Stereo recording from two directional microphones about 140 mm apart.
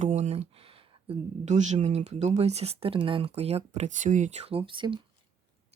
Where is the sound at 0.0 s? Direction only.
55° right (ahead or behind).